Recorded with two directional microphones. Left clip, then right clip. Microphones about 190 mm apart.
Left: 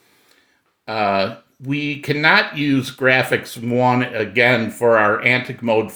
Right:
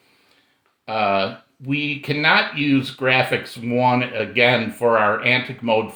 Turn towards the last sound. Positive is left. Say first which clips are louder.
# left 2 dB
turn(degrees=45)  # may be behind; listen again after turning